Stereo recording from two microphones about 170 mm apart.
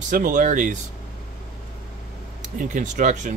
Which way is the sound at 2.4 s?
50° right (ahead or behind).